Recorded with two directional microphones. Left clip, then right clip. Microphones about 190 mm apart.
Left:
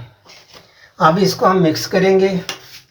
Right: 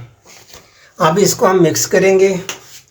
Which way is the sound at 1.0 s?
40° right (ahead or behind).